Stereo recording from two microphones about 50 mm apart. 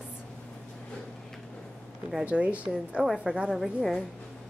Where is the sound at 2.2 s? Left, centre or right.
Right.